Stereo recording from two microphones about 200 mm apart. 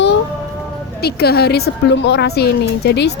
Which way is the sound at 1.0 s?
50° left (ahead or behind).